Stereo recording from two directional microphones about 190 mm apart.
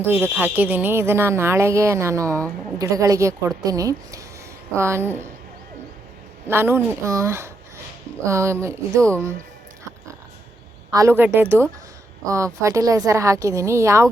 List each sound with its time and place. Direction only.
0.0 s a woman's voice: 10° right (ahead or behind)
6.5 s a woman's voice: 10° right (ahead or behind)
10.9 s a woman's voice: 15° right (ahead or behind)